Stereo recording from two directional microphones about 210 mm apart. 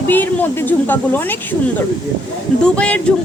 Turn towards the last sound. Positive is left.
turn(degrees=5)  # may be behind; listen again after turning